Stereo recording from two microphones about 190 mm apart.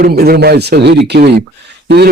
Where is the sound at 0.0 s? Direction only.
55° right (ahead or behind).